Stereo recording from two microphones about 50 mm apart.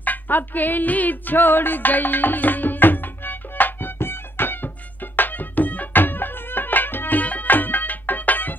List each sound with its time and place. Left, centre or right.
0.0 s music: left